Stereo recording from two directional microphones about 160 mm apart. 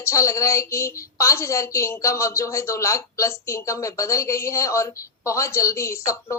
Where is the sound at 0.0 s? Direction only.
20° left (ahead or behind).